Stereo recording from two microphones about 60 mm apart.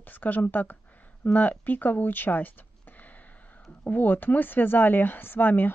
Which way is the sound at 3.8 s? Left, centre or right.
Left.